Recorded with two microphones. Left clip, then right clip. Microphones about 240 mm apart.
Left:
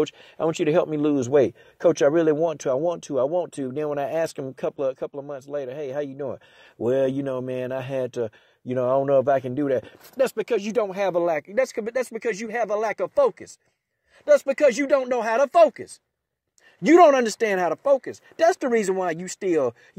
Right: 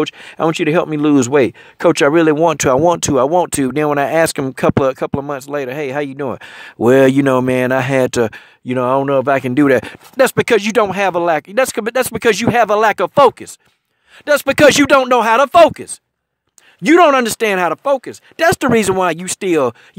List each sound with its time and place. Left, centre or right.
0.0 s speech: right